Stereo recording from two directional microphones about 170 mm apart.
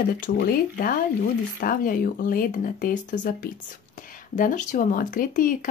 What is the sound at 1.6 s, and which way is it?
Speech, 55° left (ahead or behind).